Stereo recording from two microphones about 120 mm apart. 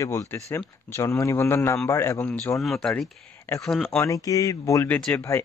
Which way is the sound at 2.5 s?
5° left (ahead or behind).